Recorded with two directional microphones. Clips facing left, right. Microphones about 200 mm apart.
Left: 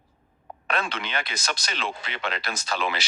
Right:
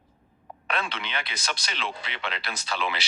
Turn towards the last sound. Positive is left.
turn(degrees=45)  # may be behind; listen again after turning